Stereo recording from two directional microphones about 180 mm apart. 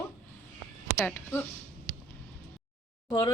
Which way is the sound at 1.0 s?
10° left (ahead or behind).